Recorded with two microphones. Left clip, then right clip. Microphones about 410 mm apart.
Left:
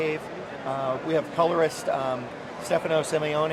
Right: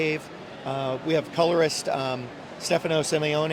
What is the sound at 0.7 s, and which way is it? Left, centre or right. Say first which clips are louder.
Speech: even; right.